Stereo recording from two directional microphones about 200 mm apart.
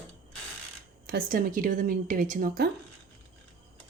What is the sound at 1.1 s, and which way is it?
Speech, 45° right (ahead or behind).